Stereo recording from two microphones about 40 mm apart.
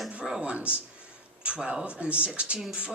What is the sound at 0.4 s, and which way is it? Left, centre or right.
Speech, right.